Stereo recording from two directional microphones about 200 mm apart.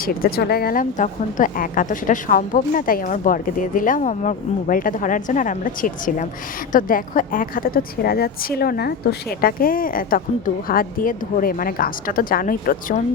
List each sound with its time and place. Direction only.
0.1 s a woman's voice: 50° left (ahead or behind)